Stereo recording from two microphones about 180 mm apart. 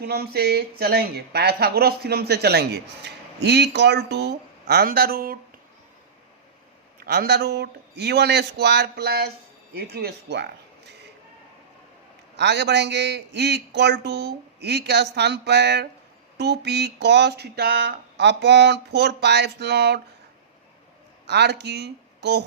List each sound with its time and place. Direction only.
0.0 s speech: 60° right (ahead or behind)
7.0 s speech: 60° right (ahead or behind)
12.4 s a sound: 70° right (ahead or behind)
21.2 s speech: 70° right (ahead or behind)